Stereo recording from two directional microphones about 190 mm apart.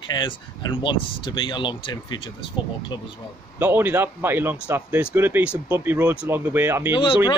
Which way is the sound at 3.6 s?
10° right (ahead or behind).